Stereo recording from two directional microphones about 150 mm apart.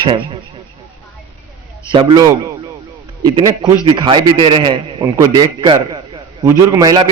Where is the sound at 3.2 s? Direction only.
25° right (ahead or behind).